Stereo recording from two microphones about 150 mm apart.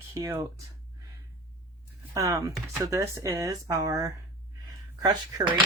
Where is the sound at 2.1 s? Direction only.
20° right (ahead or behind).